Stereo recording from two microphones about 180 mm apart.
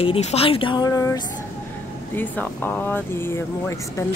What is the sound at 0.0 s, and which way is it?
A woman's voice, 35° left (ahead or behind).